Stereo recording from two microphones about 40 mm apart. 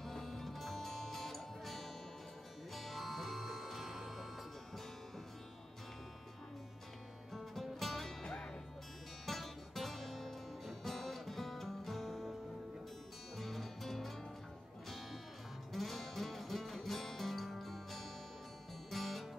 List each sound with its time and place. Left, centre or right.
0.0 s music: centre
7.8 s music: centre
8.2 s music: centre
9.2 s music: centre
13.4 s music: centre
15.7 s music: centre